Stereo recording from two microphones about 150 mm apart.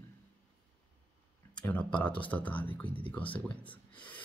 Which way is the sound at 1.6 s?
10° left (ahead or behind).